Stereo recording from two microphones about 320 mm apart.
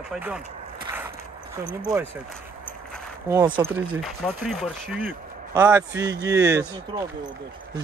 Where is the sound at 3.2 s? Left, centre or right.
Centre.